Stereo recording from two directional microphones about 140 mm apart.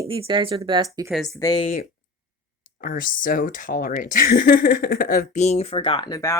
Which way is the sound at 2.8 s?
75° left (ahead or behind).